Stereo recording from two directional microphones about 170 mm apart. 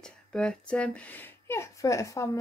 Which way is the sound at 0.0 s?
5° left (ahead or behind).